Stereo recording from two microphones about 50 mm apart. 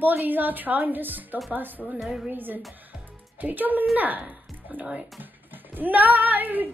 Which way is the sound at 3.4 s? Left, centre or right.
Right.